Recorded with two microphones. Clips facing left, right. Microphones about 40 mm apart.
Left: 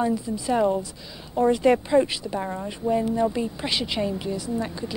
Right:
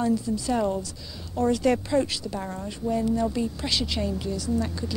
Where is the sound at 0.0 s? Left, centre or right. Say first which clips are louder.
Even; centre.